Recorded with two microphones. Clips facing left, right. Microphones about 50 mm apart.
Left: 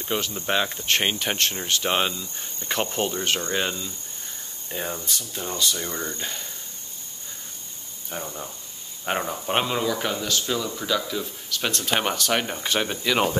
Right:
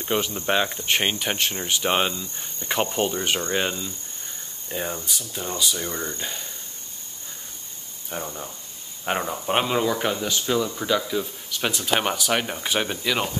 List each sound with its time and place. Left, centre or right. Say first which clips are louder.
0.0 s speech: right 3 dB; centre
4.6 s speech: right 1 dB; centre
8.1 s speech: right 1 dB; centre